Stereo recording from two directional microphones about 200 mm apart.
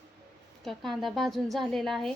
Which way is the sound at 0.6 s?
Centre (ahead or behind).